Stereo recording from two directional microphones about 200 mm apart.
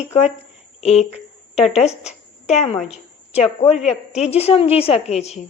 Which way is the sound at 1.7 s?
35° left (ahead or behind).